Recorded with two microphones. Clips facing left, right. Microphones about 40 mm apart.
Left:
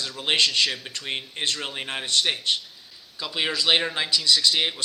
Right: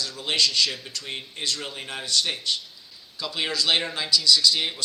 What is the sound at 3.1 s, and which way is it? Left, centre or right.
A man's voice, centre.